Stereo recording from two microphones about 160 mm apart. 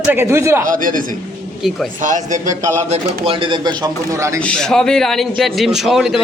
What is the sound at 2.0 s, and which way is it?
Speech, 50° right (ahead or behind).